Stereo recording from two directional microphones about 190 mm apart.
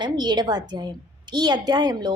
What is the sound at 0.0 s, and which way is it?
A woman's voice, 20° right (ahead or behind).